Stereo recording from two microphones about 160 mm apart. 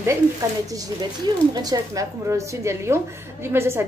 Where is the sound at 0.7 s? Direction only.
25° right (ahead or behind).